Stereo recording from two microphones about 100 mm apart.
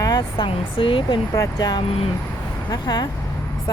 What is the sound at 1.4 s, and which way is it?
Speech, 40° left (ahead or behind).